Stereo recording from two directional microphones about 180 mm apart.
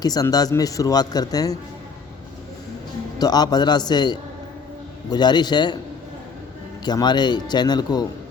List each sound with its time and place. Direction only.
0.0 s speech: 20° left (ahead or behind)
3.2 s speech: 20° left (ahead or behind)
6.8 s speech: 25° left (ahead or behind)